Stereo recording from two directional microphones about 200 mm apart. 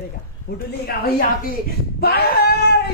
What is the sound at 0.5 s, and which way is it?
A woman's voice, 50° left (ahead or behind).